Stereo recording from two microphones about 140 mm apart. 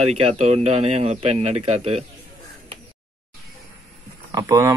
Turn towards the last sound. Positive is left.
turn(degrees=-25)  # may be behind; listen again after turning